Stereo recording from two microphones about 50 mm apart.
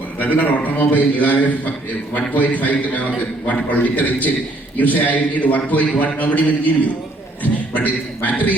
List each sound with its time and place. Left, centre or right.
0.2 s a man's voice: left